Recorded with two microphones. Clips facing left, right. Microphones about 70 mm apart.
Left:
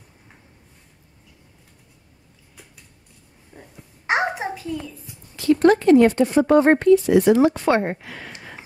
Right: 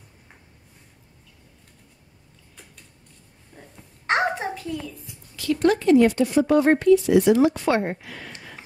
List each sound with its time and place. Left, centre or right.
3.5 s a sound: centre
4.6 s a child's voice: centre
5.3 s speech: left